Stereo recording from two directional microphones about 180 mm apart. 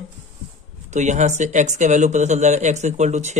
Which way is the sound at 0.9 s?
40° right (ahead or behind).